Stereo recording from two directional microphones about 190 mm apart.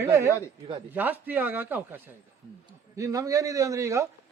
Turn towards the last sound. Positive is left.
turn(degrees=-15)  # may be behind; listen again after turning